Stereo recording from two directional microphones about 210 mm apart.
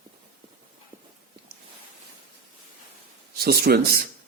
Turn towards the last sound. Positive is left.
turn(degrees=-45)  # may be behind; listen again after turning